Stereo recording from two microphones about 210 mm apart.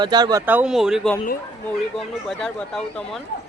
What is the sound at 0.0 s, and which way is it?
Speech, 20° right (ahead or behind).